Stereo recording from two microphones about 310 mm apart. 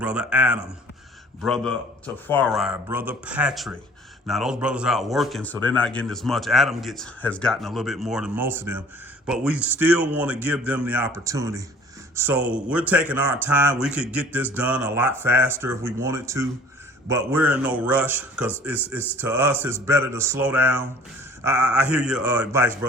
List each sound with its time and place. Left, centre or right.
0.0 s speech: centre